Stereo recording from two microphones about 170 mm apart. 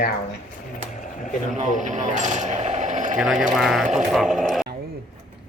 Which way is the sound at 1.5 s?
45° right (ahead or behind).